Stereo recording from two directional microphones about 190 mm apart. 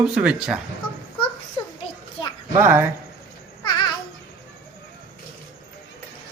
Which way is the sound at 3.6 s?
20° left (ahead or behind).